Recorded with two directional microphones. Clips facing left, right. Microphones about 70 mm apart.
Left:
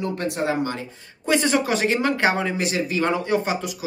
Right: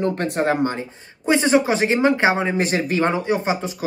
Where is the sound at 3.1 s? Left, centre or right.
Right.